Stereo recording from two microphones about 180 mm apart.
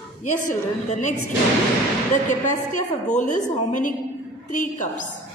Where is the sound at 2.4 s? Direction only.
45° left (ahead or behind).